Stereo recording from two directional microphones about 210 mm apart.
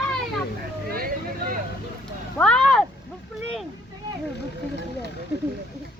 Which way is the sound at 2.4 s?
5° left (ahead or behind).